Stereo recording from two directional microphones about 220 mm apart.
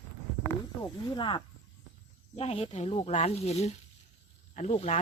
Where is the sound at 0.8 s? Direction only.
20° left (ahead or behind).